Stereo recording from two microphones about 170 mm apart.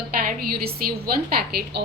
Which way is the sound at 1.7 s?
75° right (ahead or behind).